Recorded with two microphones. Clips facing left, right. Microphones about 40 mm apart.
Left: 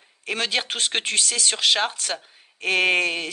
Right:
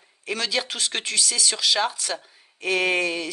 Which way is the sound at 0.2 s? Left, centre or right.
Left.